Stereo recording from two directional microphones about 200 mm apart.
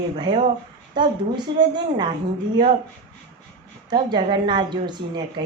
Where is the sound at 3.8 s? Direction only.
20° right (ahead or behind).